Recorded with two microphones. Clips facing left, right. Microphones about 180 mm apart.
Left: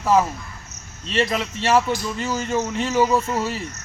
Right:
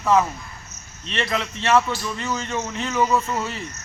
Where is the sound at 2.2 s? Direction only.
35° left (ahead or behind).